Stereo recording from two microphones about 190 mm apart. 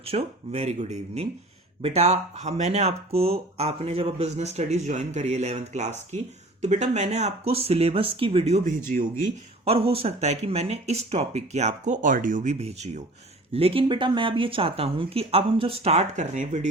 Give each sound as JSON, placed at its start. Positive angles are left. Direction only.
{"t": 0.0, "sound": "speech", "side_deg": -30}
{"t": 9.6, "sound": "speech", "side_deg": -30}